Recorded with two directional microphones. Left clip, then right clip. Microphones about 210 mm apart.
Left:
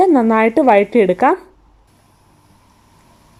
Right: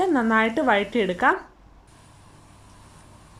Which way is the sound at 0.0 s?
25° left (ahead or behind).